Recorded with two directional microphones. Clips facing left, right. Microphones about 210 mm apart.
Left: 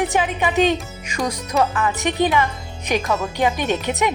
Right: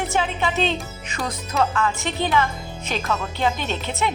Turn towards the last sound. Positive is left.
turn(degrees=15)  # may be behind; listen again after turning